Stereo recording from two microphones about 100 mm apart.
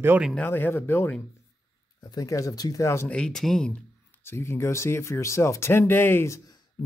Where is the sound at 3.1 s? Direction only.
10° left (ahead or behind).